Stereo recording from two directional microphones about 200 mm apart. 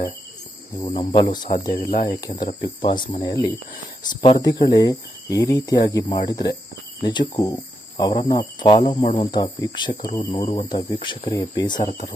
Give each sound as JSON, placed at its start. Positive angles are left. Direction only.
{"t": 0.9, "sound": "speech", "side_deg": 30}
{"t": 1.8, "sound": "speech", "side_deg": 45}
{"t": 2.1, "sound": "speech", "side_deg": 15}
{"t": 11.8, "sound": "speech", "side_deg": 40}